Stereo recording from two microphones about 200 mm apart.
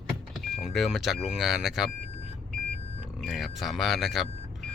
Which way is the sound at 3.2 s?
Centre (ahead or behind).